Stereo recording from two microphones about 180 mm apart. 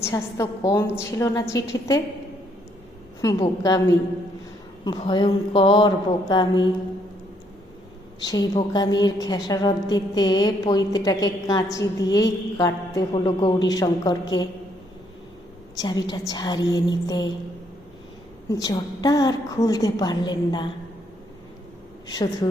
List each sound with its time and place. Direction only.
0.0 s a woman's voice: 15° left (ahead or behind)
3.2 s a woman's voice: 20° left (ahead or behind)
8.2 s a woman's voice: 20° left (ahead or behind)
15.8 s a woman's voice: 25° left (ahead or behind)
18.5 s a woman's voice: 20° left (ahead or behind)
22.0 s a woman's voice: 25° left (ahead or behind)